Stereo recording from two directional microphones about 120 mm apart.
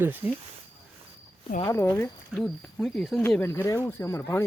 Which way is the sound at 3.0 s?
Centre (ahead or behind).